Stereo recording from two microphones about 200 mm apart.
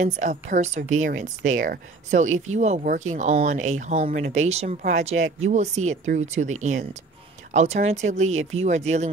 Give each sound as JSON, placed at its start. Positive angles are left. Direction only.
{"t": 0.0, "sound": "speech", "side_deg": -35}